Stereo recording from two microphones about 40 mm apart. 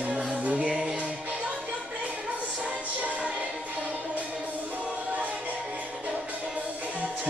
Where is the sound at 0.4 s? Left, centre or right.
Right.